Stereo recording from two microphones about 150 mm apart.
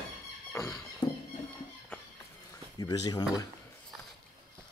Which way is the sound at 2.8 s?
25° left (ahead or behind).